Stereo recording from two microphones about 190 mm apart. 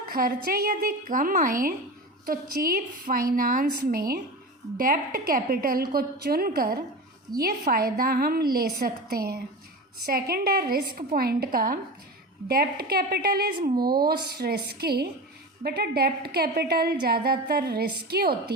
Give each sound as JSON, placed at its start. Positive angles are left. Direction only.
{"t": 0.1, "sound": "a woman's voice", "side_deg": -50}